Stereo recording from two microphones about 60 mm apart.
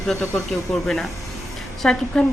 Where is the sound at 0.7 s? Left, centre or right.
Centre.